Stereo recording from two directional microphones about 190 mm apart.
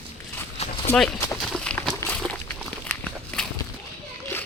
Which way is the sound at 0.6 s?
35° left (ahead or behind).